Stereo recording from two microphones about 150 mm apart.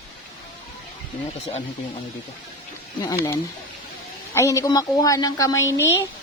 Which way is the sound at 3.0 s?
20° left (ahead or behind).